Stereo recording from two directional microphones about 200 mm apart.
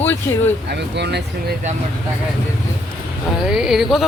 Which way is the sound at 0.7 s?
55° right (ahead or behind).